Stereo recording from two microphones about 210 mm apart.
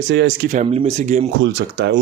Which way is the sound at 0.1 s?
55° right (ahead or behind).